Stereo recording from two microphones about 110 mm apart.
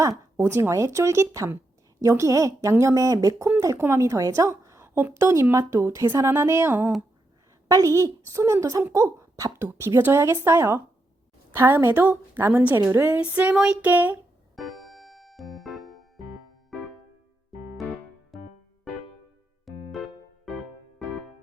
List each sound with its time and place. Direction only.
0.0 s a woman's voice: 25° right (ahead or behind)
13.1 s speech: 10° right (ahead or behind)
13.9 s speech: 15° right (ahead or behind)
14.5 s music: centre (ahead or behind)
19.6 s music: centre (ahead or behind)